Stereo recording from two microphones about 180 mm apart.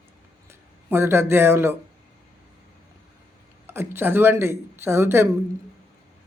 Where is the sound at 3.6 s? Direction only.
15° right (ahead or behind).